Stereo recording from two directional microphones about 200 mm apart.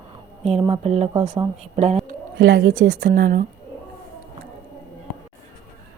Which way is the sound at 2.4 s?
60° right (ahead or behind).